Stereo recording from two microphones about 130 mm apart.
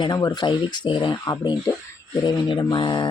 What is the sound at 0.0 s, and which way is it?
Speech, 35° left (ahead or behind).